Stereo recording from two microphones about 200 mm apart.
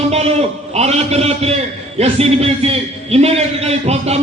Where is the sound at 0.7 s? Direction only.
30° right (ahead or behind).